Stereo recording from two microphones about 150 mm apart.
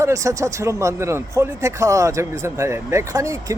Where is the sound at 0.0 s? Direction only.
20° right (ahead or behind).